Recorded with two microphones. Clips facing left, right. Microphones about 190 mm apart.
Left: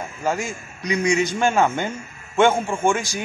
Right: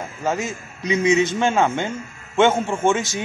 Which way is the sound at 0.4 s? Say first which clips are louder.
Right 2 dB; 20° right (ahead or behind).